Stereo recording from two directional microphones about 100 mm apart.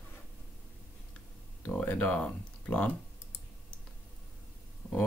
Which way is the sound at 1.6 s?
15° left (ahead or behind).